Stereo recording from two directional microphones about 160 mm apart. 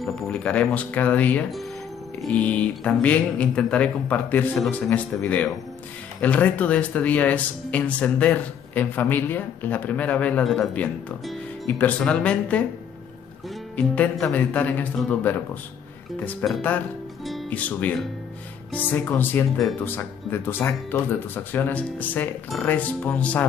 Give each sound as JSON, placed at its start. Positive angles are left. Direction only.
{"t": 0.0, "sound": "speech", "side_deg": 5}
{"t": 13.7, "sound": "speech", "side_deg": 10}
{"t": 17.2, "sound": "music", "side_deg": 5}
{"t": 18.7, "sound": "speech", "side_deg": 10}